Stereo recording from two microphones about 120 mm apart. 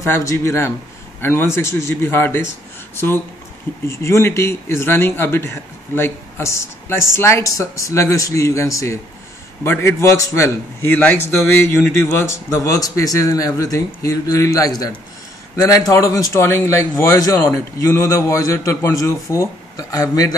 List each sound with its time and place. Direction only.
0.0 s speech: 25° left (ahead or behind)
3.8 s speech: 25° left (ahead or behind)